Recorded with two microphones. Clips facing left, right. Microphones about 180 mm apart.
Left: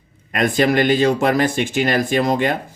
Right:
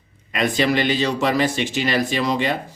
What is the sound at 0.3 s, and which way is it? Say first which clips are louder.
Speech: left 3 dB; 50° left (ahead or behind).